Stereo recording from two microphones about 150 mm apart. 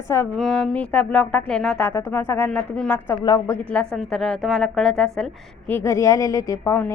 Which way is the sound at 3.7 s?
5° left (ahead or behind).